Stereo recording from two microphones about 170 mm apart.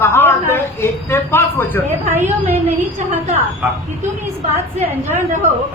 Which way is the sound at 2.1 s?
15° right (ahead or behind).